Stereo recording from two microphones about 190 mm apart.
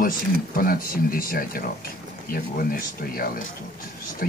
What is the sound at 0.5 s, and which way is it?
Speech, 50° left (ahead or behind).